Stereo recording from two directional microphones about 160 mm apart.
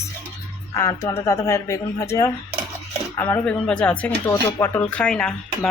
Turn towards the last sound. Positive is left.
turn(degrees=5)  # may be behind; listen again after turning